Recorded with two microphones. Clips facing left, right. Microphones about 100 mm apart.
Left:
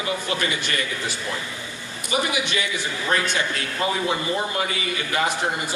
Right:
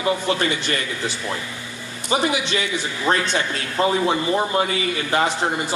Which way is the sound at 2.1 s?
30° right (ahead or behind).